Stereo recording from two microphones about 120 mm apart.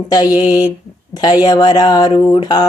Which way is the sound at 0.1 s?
35° left (ahead or behind).